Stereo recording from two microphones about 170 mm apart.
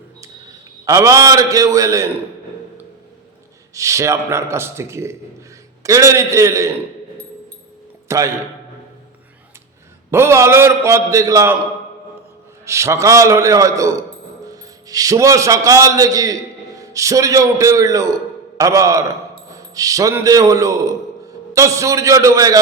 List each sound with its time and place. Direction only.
0.9 s a man's voice: 20° right (ahead or behind)
3.8 s a man's voice: 20° right (ahead or behind)
8.0 s speech: 20° right (ahead or behind)
10.1 s a man's voice: 15° right (ahead or behind)
12.6 s a man's voice: 15° right (ahead or behind)